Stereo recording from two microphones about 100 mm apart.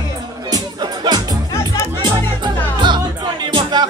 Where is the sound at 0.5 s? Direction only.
45° right (ahead or behind).